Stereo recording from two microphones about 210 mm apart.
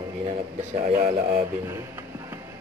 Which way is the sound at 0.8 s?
45° right (ahead or behind).